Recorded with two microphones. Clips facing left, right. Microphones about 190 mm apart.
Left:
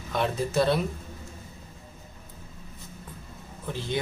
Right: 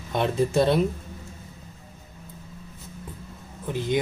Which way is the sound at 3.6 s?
15° right (ahead or behind).